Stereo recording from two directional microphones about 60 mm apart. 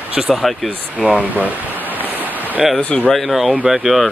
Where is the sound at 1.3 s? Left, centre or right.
Right.